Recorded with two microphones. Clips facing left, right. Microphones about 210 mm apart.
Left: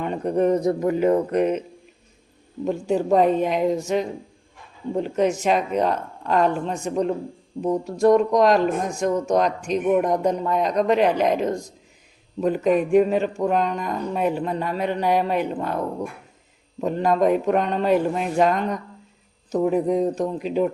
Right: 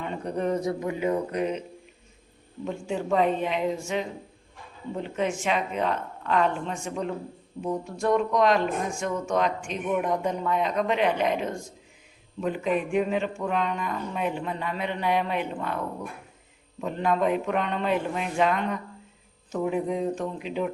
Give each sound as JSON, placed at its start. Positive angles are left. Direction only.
{"t": 0.0, "sound": "speech", "side_deg": 45}
{"t": 2.6, "sound": "speech", "side_deg": 40}
{"t": 5.0, "sound": "speech", "side_deg": 40}
{"t": 16.8, "sound": "speech", "side_deg": 40}